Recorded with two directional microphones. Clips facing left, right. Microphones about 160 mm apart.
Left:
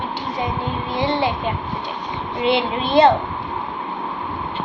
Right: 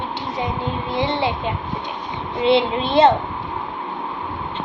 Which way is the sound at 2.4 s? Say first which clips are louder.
Right 3 dB; 25° right (ahead or behind).